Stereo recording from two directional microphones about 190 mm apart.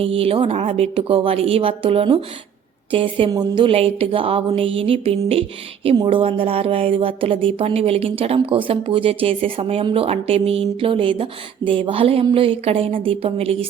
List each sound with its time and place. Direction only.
0.0 s speech: 30° right (ahead or behind)